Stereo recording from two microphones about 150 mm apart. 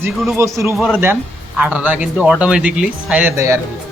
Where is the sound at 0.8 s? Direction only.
Centre (ahead or behind).